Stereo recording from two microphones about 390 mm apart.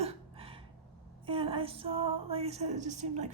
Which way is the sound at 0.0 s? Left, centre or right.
Centre.